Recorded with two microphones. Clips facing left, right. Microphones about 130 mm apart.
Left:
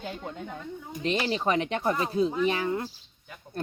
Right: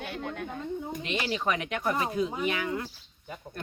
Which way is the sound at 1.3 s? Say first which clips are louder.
Left 3 dB; 30° left (ahead or behind).